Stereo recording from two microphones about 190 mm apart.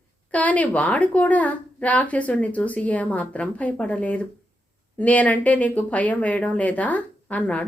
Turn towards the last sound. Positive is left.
turn(degrees=5)  # may be behind; listen again after turning